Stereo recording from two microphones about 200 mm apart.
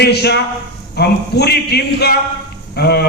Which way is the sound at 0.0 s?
55° left (ahead or behind).